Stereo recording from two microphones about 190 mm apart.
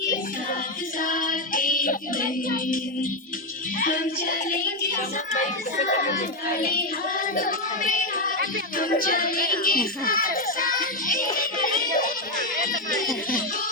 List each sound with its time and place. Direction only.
1.0 s a child's voice: 45° left (ahead or behind)
5.8 s a child's voice: 45° left (ahead or behind)
7.3 s child singing: 45° left (ahead or behind)
8.8 s a child's voice: 50° left (ahead or behind)